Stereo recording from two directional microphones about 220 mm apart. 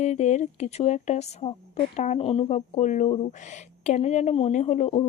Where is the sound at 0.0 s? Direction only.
30° left (ahead or behind).